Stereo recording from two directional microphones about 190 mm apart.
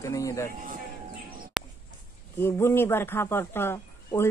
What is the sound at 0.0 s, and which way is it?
Speech, 15° left (ahead or behind).